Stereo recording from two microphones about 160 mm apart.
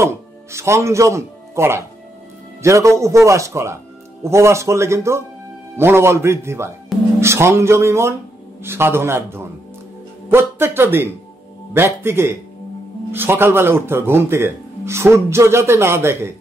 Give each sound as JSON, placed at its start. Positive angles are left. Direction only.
{"t": 0.0, "sound": "speech", "side_deg": -15}